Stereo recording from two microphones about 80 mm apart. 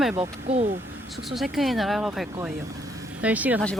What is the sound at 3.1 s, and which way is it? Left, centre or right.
Speech, centre.